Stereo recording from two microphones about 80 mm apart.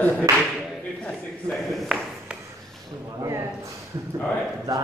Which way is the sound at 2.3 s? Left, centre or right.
Centre.